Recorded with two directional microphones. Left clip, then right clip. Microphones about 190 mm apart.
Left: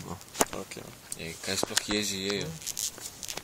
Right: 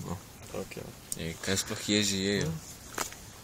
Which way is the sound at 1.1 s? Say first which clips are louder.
Right 1 dB; 35° right (ahead or behind).